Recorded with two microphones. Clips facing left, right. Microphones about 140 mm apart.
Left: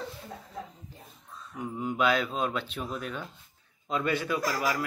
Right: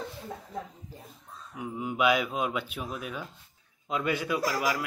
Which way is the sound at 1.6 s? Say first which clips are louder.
Even; 5° right (ahead or behind).